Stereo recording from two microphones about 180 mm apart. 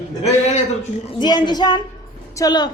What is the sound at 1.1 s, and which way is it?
Speech, 25° left (ahead or behind).